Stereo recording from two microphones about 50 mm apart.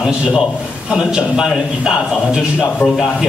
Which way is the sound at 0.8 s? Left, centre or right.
Centre.